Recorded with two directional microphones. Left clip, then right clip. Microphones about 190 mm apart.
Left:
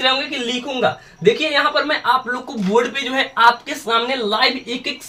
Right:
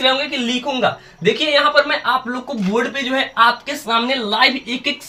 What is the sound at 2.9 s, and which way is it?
A man's voice, 15° left (ahead or behind).